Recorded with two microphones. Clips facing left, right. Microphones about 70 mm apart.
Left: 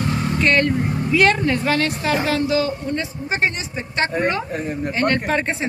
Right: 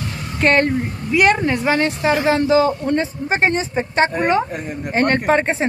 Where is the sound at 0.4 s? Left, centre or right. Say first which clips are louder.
Right 3 dB; right.